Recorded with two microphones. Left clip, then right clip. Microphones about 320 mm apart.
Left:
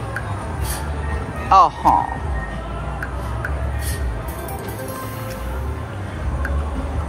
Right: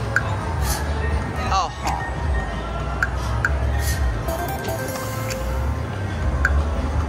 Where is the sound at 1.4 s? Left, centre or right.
Centre.